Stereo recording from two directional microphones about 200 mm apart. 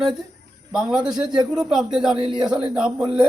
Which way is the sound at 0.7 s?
5° right (ahead or behind).